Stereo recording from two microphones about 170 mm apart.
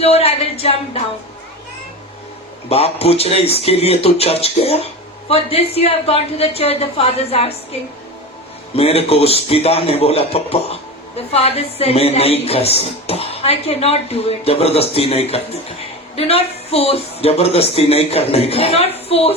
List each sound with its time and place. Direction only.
0.0 s speech: 35° left (ahead or behind)
2.6 s speech: 35° left (ahead or behind)
8.7 s speech: 35° left (ahead or behind)